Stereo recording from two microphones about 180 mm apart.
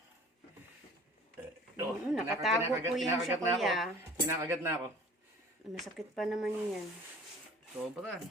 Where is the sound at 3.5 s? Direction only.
Centre (ahead or behind).